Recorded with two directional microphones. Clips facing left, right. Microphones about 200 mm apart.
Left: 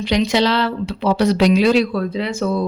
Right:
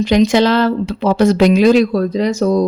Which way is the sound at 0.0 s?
45° right (ahead or behind).